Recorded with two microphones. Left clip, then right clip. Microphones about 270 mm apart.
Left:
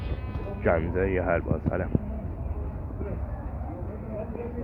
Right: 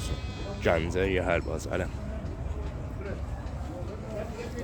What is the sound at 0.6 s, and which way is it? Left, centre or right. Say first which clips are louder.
Speech: left 1 dB; right.